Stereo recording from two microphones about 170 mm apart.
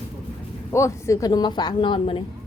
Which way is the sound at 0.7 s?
15° left (ahead or behind).